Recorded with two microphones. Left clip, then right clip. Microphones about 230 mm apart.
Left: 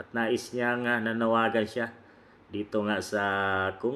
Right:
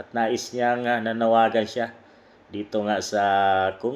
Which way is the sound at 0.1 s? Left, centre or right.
Centre.